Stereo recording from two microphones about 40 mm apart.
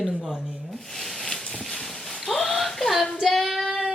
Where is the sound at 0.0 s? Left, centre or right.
Centre.